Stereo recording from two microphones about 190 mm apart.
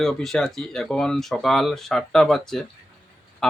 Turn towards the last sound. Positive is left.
turn(degrees=0)  # may be behind; listen again after turning